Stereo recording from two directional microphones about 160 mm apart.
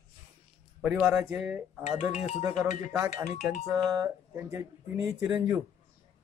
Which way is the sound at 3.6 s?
Centre (ahead or behind).